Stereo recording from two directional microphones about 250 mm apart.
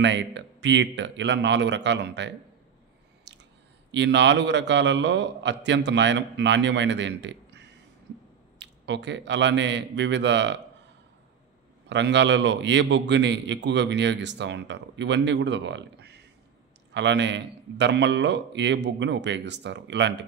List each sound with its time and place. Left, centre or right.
0.0 s a man's voice: right
3.3 s chewing: right
3.9 s a man's voice: right
11.9 s a man's voice: right